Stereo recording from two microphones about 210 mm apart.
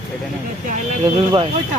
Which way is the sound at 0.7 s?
30° right (ahead or behind).